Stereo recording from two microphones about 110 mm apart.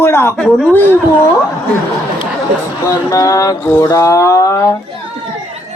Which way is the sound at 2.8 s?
30° left (ahead or behind).